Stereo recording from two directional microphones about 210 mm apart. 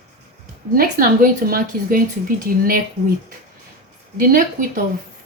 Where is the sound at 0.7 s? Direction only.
45° right (ahead or behind).